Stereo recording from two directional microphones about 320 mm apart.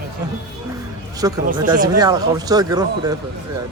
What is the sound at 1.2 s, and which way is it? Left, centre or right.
Speech, centre.